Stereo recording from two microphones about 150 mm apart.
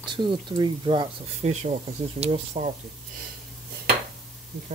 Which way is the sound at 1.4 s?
50° right (ahead or behind).